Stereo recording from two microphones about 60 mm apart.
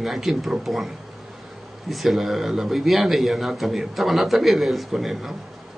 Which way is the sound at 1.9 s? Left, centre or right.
Centre.